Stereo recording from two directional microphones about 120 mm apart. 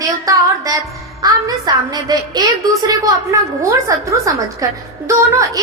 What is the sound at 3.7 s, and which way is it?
Speech, 25° right (ahead or behind).